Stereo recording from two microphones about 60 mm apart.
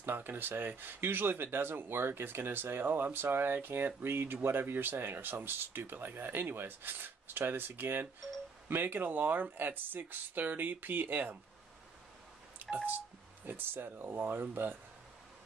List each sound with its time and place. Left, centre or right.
0.0 s speech: right
13.5 s speech: right